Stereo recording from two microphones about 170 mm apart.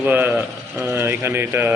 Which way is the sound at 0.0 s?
10° right (ahead or behind).